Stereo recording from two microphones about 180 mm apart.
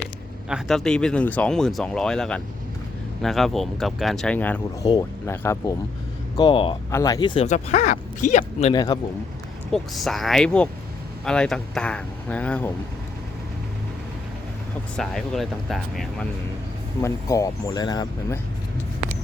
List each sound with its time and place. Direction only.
0.4 s speech: centre (ahead or behind); by 5.7 s 15° left (ahead or behind)
6.3 s speech: 25° left (ahead or behind)
7.4 s speech: 40° left (ahead or behind)
8.7 s speech: 25° left (ahead or behind)
9.7 s speech: centre (ahead or behind)
14.9 s speech: centre (ahead or behind)
17.0 s speech: 20° left (ahead or behind)